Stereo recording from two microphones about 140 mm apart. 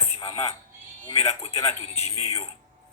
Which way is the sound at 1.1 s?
50° left (ahead or behind).